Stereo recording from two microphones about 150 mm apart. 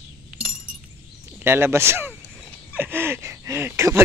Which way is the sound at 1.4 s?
15° right (ahead or behind).